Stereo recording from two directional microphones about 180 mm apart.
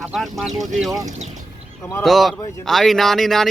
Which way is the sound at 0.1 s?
Centre (ahead or behind).